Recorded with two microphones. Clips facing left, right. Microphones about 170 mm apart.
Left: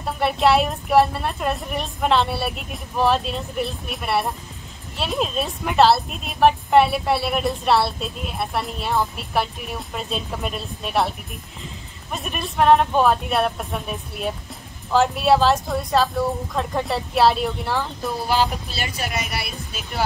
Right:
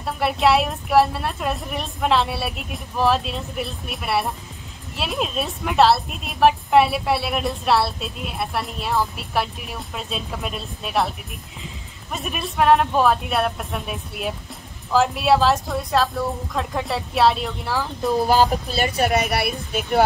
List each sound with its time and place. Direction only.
0.0 s a woman's voice: centre (ahead or behind)
18.2 s speech: 45° right (ahead or behind); by 19.8 s 60° right (ahead or behind)